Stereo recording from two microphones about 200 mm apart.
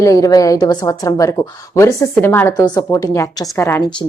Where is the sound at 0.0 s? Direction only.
15° left (ahead or behind).